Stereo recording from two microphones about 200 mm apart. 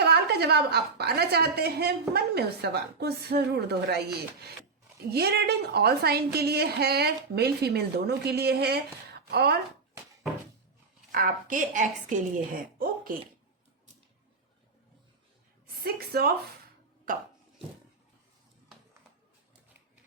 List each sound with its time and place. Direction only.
0.0 s a woman's voice: 55° right (ahead or behind)
5.1 s a woman's voice: 55° right (ahead or behind)
11.1 s a woman's voice: 45° right (ahead or behind)
15.6 s a woman's voice: 50° right (ahead or behind)